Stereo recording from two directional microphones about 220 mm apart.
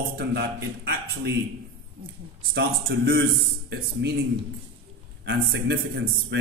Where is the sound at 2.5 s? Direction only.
50° right (ahead or behind).